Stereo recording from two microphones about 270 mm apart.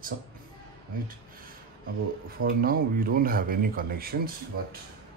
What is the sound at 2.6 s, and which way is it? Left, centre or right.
Speech, right.